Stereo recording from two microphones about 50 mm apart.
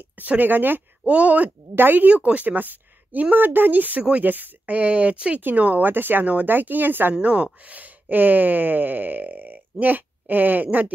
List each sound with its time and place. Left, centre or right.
0.2 s a woman's voice: right
1.0 s speech: right
1.8 s a woman's voice: right
6.2 s speech: right
6.5 s a woman's voice: right
7.2 s speech: right
7.6 s a sound: right